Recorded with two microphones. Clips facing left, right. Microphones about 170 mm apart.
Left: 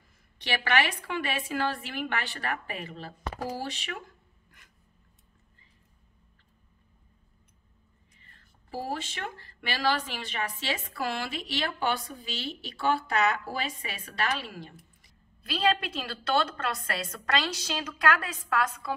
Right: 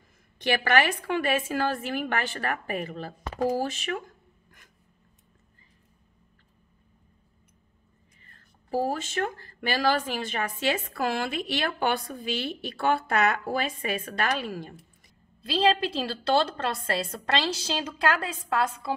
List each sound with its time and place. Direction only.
0.4 s speech: 45° right (ahead or behind)
8.6 s speech: 45° right (ahead or behind)
15.4 s a woman's voice: 30° right (ahead or behind)